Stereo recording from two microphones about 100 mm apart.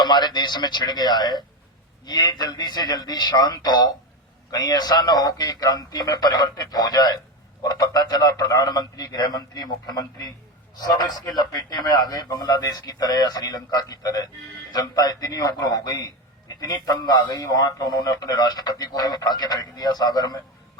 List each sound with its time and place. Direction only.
0.0 s a man's voice: 45° left (ahead or behind)